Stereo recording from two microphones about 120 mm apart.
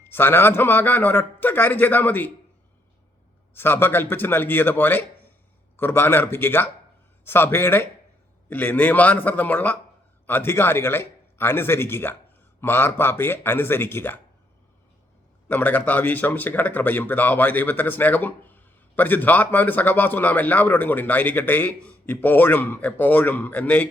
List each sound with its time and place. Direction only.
0.0 s speech: 20° left (ahead or behind)
3.5 s speech: 20° left (ahead or behind)
15.4 s speech: 15° left (ahead or behind)